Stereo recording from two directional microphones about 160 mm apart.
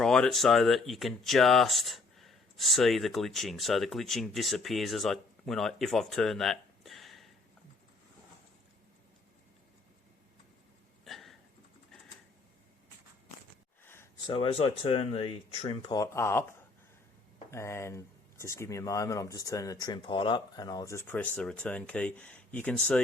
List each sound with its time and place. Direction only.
0.0 s speech: 5° left (ahead or behind)
11.0 s hiccup: centre (ahead or behind)
13.8 s a sound: 15° left (ahead or behind)
14.3 s speech: 35° left (ahead or behind); by 23.0 s 10° left (ahead or behind)